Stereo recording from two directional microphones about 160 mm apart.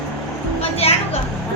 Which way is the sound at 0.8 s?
35° left (ahead or behind).